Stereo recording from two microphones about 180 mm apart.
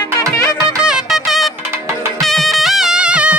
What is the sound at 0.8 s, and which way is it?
Music, centre (ahead or behind).